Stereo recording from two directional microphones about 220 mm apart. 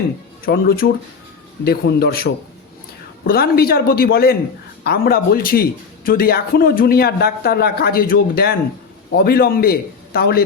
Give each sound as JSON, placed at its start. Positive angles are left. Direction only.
{"t": 0.4, "sound": "speech", "side_deg": 45}